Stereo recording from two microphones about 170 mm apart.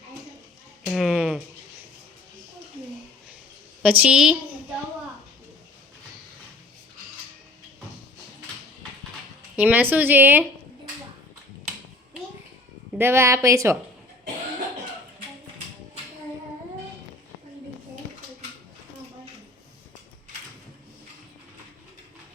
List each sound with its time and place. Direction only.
0.9 s a sound: centre (ahead or behind)
3.8 s a woman's voice: 5° right (ahead or behind)
9.6 s speech: 10° right (ahead or behind)
13.0 s speech: 15° right (ahead or behind)